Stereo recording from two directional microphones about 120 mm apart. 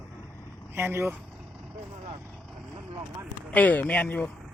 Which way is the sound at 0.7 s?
20° right (ahead or behind).